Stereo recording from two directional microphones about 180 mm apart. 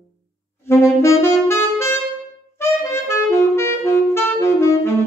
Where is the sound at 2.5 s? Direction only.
15° left (ahead or behind).